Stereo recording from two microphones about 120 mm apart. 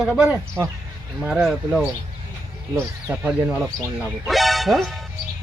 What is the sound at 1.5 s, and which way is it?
Speech, centre (ahead or behind).